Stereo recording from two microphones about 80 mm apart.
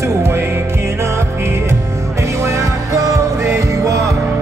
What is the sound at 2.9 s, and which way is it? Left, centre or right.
Music, right.